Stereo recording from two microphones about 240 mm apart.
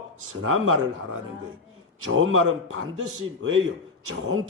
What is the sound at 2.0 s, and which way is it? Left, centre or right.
Speech, right.